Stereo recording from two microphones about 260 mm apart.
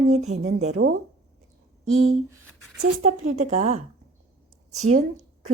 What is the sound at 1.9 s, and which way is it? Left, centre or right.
Speech, right.